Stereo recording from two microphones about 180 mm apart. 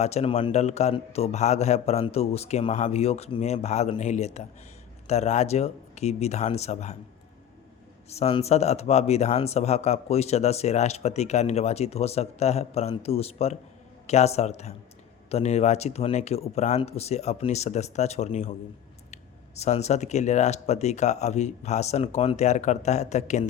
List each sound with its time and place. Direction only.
0.0 s speech: 35° left (ahead or behind)
8.1 s speech: 35° left (ahead or behind)